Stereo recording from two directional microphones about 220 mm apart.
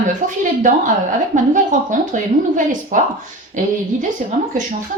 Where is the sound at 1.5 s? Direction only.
35° right (ahead or behind).